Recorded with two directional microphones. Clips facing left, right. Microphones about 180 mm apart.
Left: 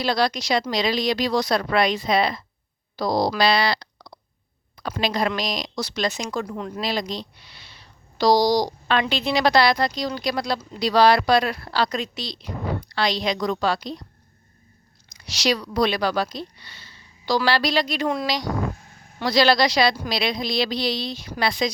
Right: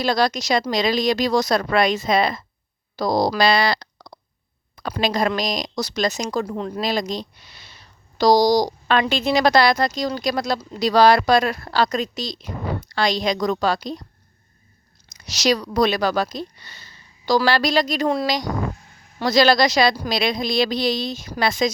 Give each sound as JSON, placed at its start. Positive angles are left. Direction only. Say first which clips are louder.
{"t": 0.0, "sound": "a woman's voice", "louder": "right 2 dB", "side_deg": -45}
{"t": 15.1, "sound": "a woman's voice", "louder": "right 3 dB", "side_deg": -45}